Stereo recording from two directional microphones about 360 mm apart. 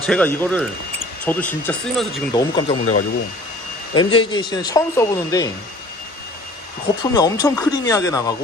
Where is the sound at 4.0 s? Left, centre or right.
Centre.